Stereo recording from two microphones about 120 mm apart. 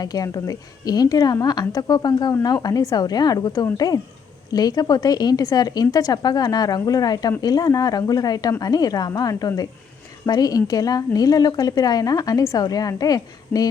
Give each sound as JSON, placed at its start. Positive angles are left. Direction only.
{"t": 0.0, "sound": "a woman's voice", "side_deg": 30}